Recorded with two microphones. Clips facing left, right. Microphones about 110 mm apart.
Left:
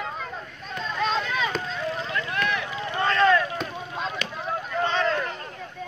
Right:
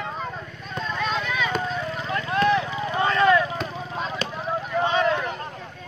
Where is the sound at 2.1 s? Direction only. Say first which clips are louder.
Right 10 dB; 30° right (ahead or behind).